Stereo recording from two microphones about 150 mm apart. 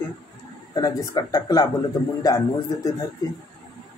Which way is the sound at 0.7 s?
25° left (ahead or behind).